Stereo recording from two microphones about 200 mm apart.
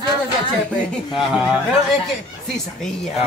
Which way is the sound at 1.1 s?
5° right (ahead or behind).